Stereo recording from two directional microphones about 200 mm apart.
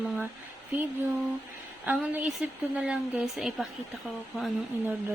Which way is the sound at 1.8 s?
10° right (ahead or behind).